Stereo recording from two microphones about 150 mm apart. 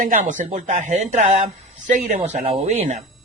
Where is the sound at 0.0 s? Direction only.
60° right (ahead or behind).